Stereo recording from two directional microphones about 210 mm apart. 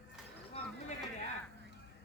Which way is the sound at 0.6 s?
30° left (ahead or behind).